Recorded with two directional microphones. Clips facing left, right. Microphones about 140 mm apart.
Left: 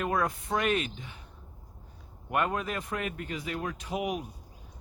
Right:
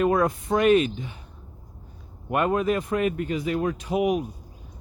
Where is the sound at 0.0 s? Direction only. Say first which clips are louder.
Right 8 dB; 25° right (ahead or behind).